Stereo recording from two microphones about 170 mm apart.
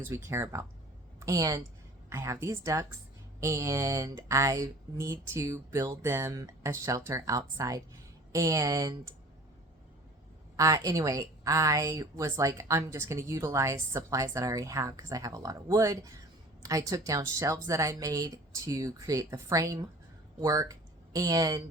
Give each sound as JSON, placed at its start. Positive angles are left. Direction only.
{"t": 0.0, "sound": "a woman's voice", "side_deg": -15}
{"t": 10.6, "sound": "a woman's voice", "side_deg": -20}